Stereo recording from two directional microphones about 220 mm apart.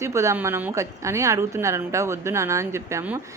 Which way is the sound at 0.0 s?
15° right (ahead or behind).